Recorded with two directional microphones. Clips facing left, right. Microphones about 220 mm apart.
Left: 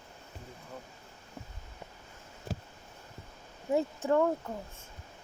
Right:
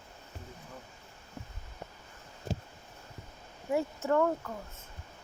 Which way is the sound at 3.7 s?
20° left (ahead or behind).